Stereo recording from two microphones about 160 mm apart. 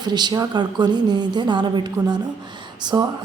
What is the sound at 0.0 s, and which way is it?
Speech, 25° right (ahead or behind).